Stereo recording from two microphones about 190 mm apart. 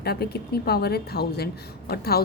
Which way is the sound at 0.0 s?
55° left (ahead or behind).